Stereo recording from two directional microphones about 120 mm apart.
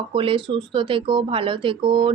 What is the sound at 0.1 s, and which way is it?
A woman's voice, 45° right (ahead or behind).